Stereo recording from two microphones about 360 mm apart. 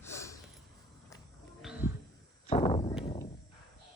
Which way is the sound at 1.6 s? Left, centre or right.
Centre.